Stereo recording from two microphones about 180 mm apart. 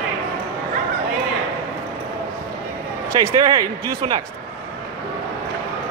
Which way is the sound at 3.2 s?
25° right (ahead or behind).